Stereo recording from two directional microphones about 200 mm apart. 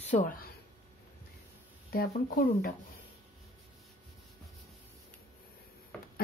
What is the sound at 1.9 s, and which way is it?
Speech, 50° left (ahead or behind).